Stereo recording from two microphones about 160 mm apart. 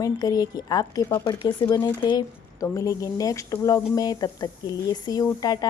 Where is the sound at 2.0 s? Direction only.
25° left (ahead or behind).